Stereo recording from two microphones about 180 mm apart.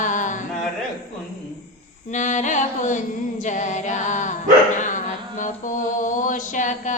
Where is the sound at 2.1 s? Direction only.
40° left (ahead or behind).